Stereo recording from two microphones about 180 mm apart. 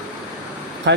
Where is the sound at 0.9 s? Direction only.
80° right.